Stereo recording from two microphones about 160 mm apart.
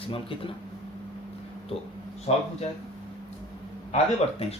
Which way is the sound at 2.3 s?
40° left (ahead or behind).